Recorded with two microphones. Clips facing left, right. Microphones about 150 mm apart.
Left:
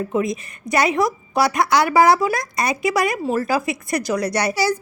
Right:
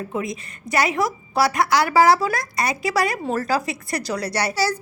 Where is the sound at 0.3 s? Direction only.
20° left (ahead or behind).